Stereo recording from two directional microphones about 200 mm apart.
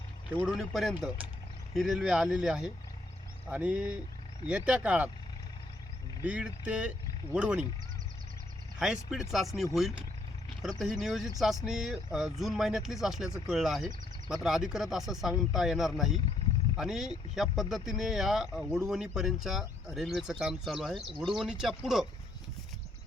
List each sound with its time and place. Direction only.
0.3 s speech: 5° right (ahead or behind)
6.2 s speech: 5° right (ahead or behind)
8.8 s speech: 5° right (ahead or behind)